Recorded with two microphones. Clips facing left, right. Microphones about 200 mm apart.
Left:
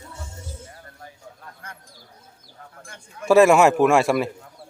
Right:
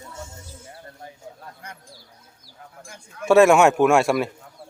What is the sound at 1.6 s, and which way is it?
Bird, 20° right (ahead or behind).